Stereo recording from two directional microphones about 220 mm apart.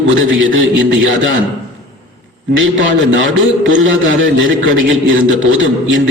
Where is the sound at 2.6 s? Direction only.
60° right (ahead or behind).